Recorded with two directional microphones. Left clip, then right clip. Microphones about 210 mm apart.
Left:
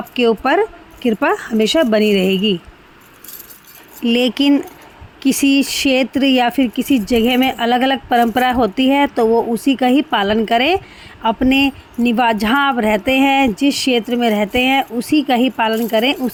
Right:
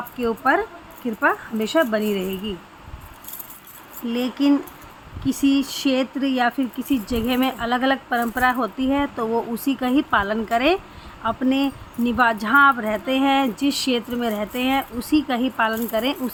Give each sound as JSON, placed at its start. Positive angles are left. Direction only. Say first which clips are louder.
{"t": 0.2, "sound": "speech", "louder": "left 6 dB", "side_deg": 35}
{"t": 4.0, "sound": "speech", "louder": "left 7 dB", "side_deg": 35}